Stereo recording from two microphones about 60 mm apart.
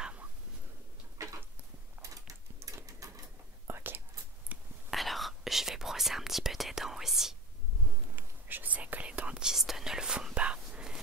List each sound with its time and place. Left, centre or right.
0.0 s a sound: right
1.2 s a sound: right
3.6 s whispering: right
4.5 s whispering: right
4.9 s whispering: centre
8.2 s whispering: right; by 11.0 s centre